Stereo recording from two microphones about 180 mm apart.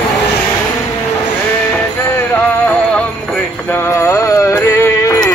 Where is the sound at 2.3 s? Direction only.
10° left (ahead or behind).